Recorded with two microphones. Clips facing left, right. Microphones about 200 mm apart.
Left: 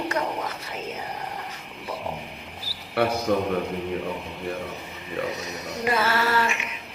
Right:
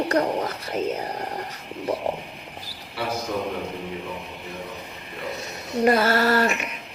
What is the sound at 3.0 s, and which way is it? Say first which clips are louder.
Speech: left 7 dB; 60° left (ahead or behind).